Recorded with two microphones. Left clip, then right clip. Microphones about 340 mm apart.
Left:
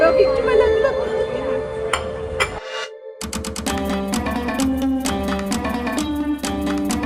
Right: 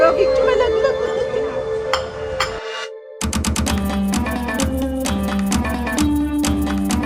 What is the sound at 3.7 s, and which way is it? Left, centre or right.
Music, centre.